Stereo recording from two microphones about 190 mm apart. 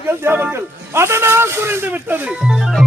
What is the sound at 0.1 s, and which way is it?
A man's voice, 10° right (ahead or behind).